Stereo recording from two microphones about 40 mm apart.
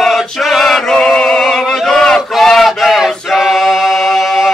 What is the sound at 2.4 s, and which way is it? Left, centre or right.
Choir, centre.